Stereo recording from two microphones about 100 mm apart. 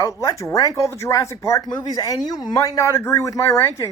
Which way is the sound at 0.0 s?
30° left (ahead or behind).